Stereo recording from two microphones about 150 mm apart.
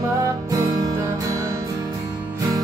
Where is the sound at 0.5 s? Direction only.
20° right (ahead or behind).